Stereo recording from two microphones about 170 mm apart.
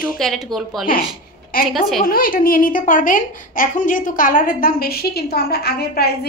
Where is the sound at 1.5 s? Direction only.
60° left (ahead or behind).